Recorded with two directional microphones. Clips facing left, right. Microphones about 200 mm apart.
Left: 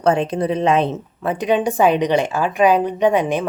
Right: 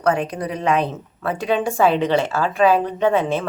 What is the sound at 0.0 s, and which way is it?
A woman's voice, 25° left (ahead or behind).